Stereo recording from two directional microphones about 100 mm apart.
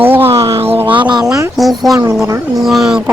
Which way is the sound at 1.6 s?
Centre (ahead or behind).